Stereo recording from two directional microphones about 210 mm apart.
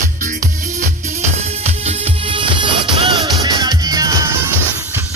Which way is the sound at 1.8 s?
25° right (ahead or behind).